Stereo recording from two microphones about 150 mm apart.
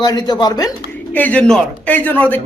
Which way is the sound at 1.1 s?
10° left (ahead or behind).